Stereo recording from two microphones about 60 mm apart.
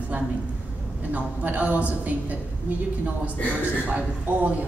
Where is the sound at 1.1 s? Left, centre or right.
Right.